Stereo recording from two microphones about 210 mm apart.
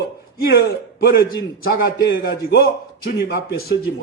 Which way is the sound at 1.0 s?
50° left (ahead or behind).